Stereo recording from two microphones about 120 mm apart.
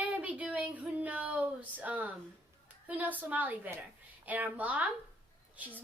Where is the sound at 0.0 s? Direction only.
10° right (ahead or behind).